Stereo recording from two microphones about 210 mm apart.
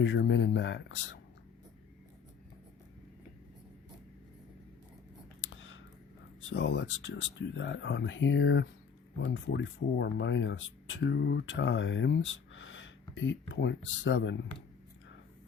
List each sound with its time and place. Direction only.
0.0 s speech: 60° left (ahead or behind)
5.4 s a sound: 60° left (ahead or behind)
6.5 s speech: 55° left (ahead or behind)